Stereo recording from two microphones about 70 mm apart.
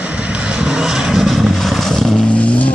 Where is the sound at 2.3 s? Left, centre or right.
Centre.